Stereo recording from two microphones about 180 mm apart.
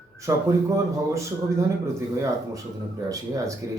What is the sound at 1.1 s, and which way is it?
Speech, 15° right (ahead or behind).